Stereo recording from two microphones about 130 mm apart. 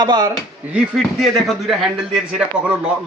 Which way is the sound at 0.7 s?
Centre (ahead or behind).